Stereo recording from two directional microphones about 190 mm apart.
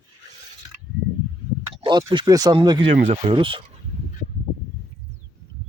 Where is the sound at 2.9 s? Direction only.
45° right (ahead or behind).